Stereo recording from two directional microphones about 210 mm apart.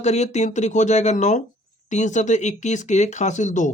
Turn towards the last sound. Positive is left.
turn(degrees=35)  # may be behind; listen again after turning